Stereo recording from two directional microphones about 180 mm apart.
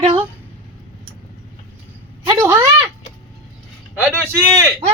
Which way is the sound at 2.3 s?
10° right (ahead or behind).